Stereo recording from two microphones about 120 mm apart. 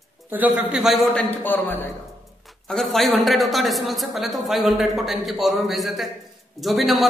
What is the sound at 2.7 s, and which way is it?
A woman's voice, centre (ahead or behind).